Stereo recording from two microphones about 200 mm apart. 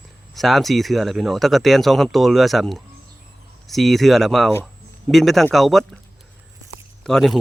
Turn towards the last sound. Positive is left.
turn(degrees=0)  # may be behind; listen again after turning